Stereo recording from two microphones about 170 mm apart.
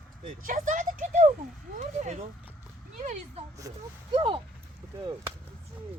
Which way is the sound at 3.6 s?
20° right (ahead or behind).